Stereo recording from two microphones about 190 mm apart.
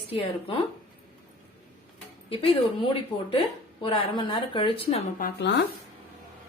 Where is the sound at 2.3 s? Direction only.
30° left (ahead or behind).